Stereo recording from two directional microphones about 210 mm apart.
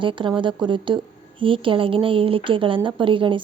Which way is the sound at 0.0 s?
25° right (ahead or behind).